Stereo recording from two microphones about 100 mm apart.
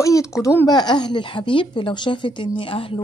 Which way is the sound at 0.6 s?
45° left (ahead or behind).